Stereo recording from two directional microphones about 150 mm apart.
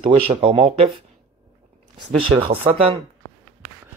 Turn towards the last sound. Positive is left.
turn(degrees=-35)  # may be behind; listen again after turning